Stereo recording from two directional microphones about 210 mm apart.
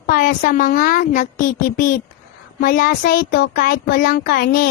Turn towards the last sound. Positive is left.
turn(degrees=45)  # may be behind; listen again after turning